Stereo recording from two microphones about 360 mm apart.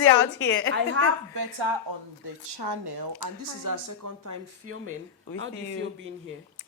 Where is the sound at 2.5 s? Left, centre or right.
Right.